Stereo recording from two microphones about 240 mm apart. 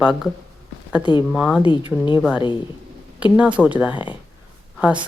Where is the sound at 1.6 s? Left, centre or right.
Centre.